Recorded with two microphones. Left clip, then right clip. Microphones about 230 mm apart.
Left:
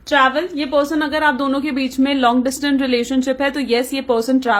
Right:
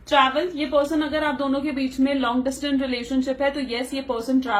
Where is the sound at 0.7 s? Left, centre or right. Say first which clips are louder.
Left 5 dB; left.